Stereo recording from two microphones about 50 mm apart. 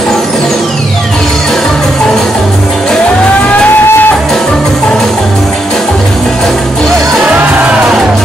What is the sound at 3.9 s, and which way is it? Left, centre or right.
Music, left.